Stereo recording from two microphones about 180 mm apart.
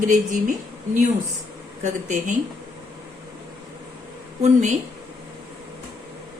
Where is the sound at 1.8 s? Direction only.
45° right (ahead or behind).